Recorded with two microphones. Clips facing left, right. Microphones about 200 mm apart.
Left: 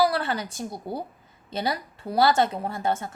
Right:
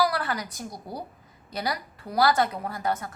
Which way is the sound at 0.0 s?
25° left (ahead or behind).